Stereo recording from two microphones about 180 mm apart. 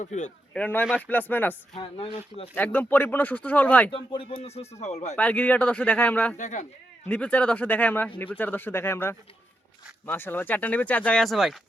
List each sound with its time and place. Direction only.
0.0 s speech: 40° left (ahead or behind)
0.5 s speech: 10° left (ahead or behind)
1.7 s speech: 30° left (ahead or behind)
2.6 s speech: 10° left (ahead or behind)
3.9 s speech: 30° left (ahead or behind)
5.1 s speech: 10° left (ahead or behind)
6.3 s speech: 40° left (ahead or behind)
7.1 s speech: 5° left (ahead or behind)